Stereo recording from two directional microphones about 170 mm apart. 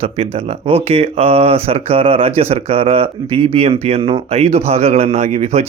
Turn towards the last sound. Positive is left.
turn(degrees=-40)  # may be behind; listen again after turning